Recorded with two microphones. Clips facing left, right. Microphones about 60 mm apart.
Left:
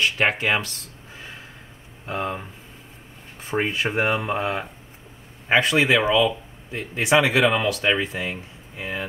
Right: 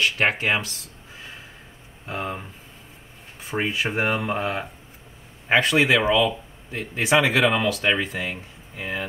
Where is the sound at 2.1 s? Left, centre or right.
Centre.